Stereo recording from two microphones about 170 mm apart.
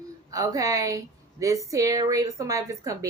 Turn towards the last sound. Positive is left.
turn(degrees=-20)  # may be behind; listen again after turning